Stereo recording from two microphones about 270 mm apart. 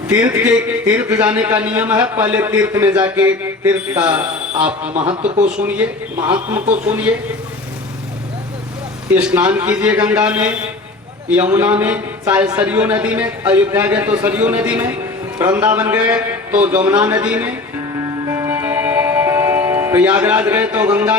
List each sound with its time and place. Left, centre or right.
0.1 s a man's voice: centre
4.9 s speech: right
5.6 s a man's voice: centre
9.0 s a man's voice: centre
18.3 s music: centre